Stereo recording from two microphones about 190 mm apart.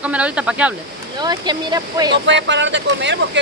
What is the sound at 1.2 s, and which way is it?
Speech, 20° right (ahead or behind).